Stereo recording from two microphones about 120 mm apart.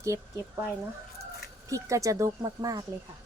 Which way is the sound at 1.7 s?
25° right (ahead or behind).